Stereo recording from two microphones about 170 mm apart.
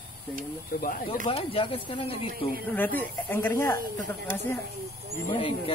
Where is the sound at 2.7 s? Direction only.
10° left (ahead or behind).